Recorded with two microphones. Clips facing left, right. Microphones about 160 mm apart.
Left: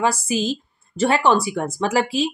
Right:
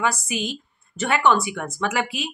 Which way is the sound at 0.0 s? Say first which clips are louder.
Left 4 dB; 30° left (ahead or behind).